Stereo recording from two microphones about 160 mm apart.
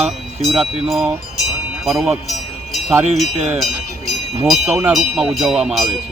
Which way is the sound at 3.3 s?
45° right (ahead or behind).